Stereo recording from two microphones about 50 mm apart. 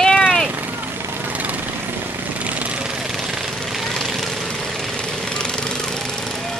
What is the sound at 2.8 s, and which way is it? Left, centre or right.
Vehicle, centre.